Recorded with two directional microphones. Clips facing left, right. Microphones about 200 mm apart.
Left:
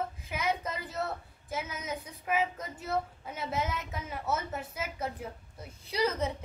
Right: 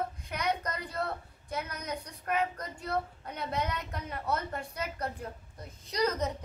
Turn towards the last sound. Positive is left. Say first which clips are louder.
# even
turn(degrees=10)  # may be behind; listen again after turning